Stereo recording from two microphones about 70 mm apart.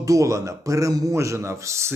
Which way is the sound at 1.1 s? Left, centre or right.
Right.